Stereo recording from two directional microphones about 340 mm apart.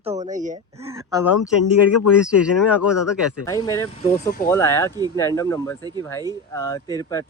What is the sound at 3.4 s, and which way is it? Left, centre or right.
Speech, centre.